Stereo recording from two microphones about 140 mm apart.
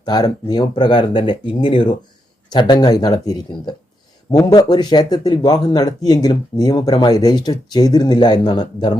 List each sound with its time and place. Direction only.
0.0 s speech: 30° left (ahead or behind)